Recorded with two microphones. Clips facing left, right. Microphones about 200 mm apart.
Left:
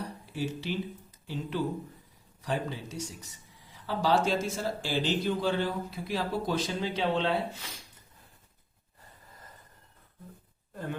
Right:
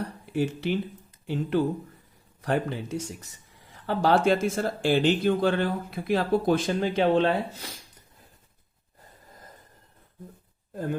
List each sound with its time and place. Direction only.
0.3 s speech: 55° right (ahead or behind)